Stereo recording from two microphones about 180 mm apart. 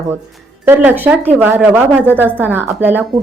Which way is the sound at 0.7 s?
10° right (ahead or behind).